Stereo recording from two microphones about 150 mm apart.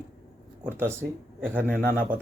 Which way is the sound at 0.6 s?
15° right (ahead or behind).